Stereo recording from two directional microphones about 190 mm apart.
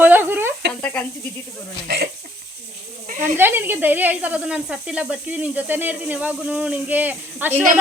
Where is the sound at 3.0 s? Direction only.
45° right (ahead or behind).